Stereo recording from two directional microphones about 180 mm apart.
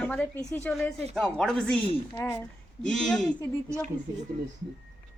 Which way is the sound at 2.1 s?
15° left (ahead or behind).